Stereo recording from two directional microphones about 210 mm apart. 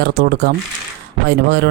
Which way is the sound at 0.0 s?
50° right (ahead or behind).